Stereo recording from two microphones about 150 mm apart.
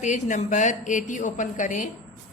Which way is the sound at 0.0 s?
55° left (ahead or behind).